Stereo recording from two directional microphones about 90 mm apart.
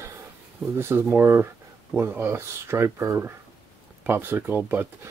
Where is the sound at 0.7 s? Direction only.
25° right (ahead or behind).